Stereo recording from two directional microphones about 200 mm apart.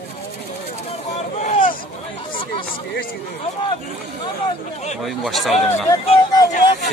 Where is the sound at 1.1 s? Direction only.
40° left (ahead or behind).